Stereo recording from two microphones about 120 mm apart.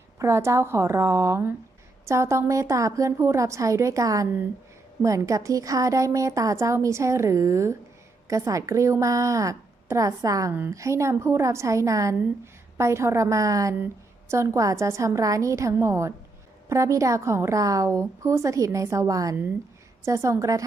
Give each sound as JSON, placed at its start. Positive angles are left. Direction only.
{"t": 0.2, "sound": "a woman's voice", "side_deg": -25}